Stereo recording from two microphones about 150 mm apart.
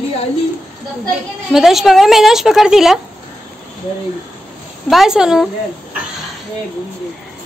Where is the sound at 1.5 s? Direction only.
Centre (ahead or behind).